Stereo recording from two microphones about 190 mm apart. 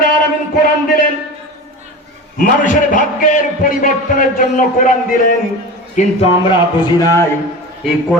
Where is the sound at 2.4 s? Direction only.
45° left (ahead or behind).